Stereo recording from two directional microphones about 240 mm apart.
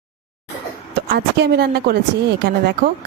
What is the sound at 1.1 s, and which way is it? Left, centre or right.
A woman's voice, right.